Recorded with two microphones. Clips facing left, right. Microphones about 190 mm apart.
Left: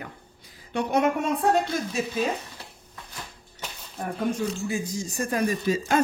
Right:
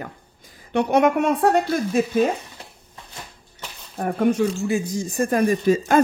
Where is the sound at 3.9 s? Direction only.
65° right (ahead or behind).